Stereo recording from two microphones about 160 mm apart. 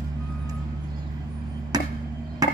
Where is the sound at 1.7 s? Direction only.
25° right (ahead or behind).